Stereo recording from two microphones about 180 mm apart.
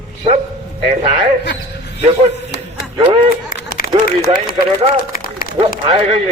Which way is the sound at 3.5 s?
55° left (ahead or behind).